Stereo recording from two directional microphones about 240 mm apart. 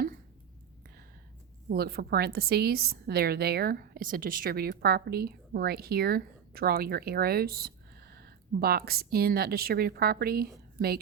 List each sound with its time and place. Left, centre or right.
1.7 s a woman's voice: right